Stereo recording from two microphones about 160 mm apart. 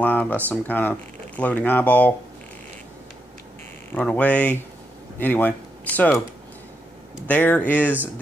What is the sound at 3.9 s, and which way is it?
Speech, 5° left (ahead or behind).